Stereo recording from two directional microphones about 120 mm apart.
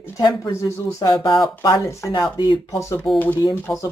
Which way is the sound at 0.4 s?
25° left (ahead or behind).